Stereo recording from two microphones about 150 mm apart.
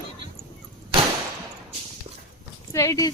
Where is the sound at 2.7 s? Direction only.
20° left (ahead or behind).